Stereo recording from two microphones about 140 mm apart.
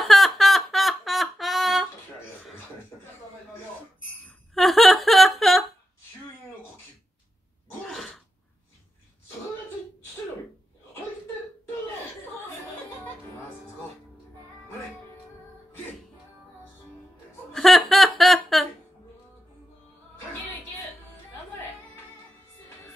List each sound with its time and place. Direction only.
0.0 s a sound: centre (ahead or behind)
4.6 s wail: centre (ahead or behind)
7.8 s sneeze: centre (ahead or behind)
17.5 s chuckle: centre (ahead or behind)